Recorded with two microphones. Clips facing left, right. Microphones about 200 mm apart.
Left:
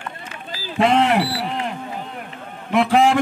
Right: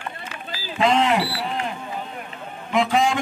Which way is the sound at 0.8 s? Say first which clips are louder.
Left 2 dB; 60° left (ahead or behind).